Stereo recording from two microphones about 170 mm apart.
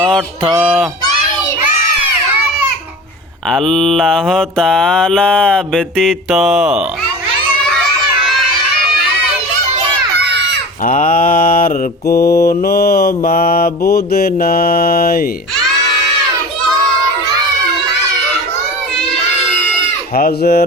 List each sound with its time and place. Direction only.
0.6 s mantra: centre (ahead or behind)
3.5 s mantra: centre (ahead or behind)
10.8 s mantra: 55° left (ahead or behind)
12.1 s mantra: 65° left (ahead or behind)
20.1 s mantra: 65° left (ahead or behind)